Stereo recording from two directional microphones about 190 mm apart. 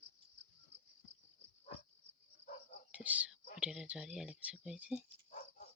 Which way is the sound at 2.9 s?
5° right (ahead or behind).